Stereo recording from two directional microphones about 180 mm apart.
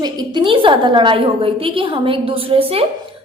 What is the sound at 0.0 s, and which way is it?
A woman's voice, 25° right (ahead or behind).